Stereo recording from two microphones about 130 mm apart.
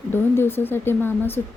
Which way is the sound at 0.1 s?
15° left (ahead or behind).